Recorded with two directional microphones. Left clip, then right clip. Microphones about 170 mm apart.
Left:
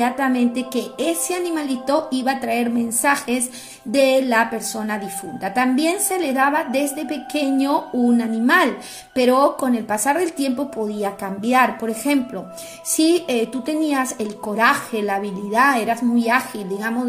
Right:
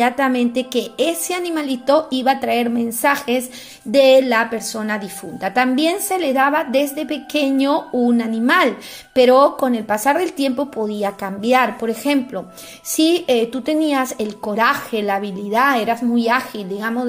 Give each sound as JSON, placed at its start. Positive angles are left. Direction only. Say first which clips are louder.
{"t": 0.0, "sound": "a woman's voice", "louder": "right 3 dB", "side_deg": -25}